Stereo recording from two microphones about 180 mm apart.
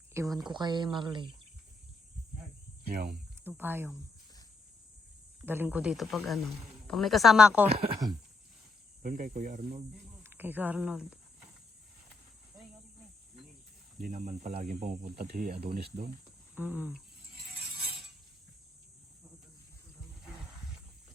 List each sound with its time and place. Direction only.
0.1 s speech: 15° right (ahead or behind)
2.8 s speech: 60° right (ahead or behind)
3.4 s speech: 10° right (ahead or behind)
5.4 s a man's voice: 10° right (ahead or behind)
8.0 s speech: 25° right (ahead or behind)
9.0 s speech: 45° right (ahead or behind)
10.2 s speech: 10° right (ahead or behind)
14.0 s speech: 45° right (ahead or behind)
16.6 s speech: 10° right (ahead or behind)